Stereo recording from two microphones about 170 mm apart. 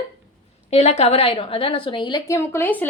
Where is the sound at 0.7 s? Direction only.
40° left (ahead or behind).